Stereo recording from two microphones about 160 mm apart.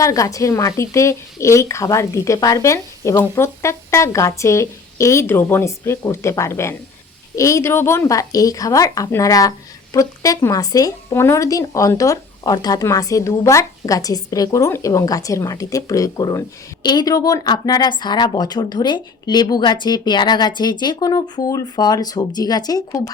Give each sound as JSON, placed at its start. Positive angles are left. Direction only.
{"t": 0.0, "sound": "speech", "side_deg": 20}